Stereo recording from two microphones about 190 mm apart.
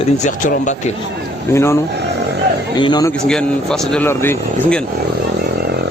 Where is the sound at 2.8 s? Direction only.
20° left (ahead or behind).